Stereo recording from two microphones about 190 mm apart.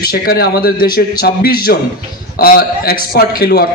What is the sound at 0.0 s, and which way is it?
A man's voice, 50° left (ahead or behind).